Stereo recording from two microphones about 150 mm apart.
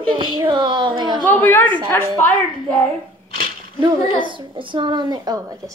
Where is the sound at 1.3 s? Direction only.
15° left (ahead or behind).